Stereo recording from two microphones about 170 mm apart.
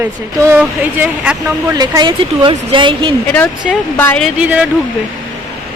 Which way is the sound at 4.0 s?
10° left (ahead or behind).